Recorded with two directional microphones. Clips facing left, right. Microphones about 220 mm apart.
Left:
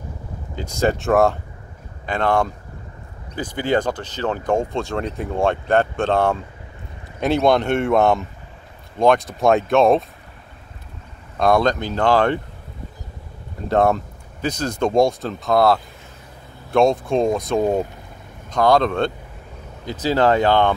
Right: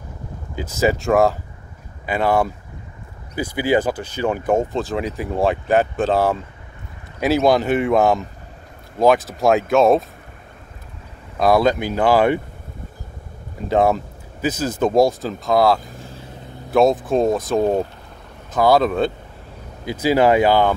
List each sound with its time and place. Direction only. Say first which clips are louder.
0.6 s speech: right 1 dB; 5° right (ahead or behind)
11.3 s speech: right 1 dB; 5° right (ahead or behind)
13.7 s speech: even; centre (ahead or behind)
16.0 s vehicle: right 7 dB; 30° right (ahead or behind)
16.7 s speech: right 1 dB; centre (ahead or behind)